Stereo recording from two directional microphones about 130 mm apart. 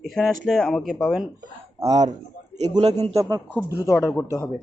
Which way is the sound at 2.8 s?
55° right (ahead or behind).